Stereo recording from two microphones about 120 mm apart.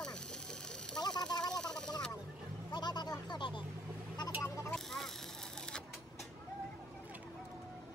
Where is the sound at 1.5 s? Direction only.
5° left (ahead or behind).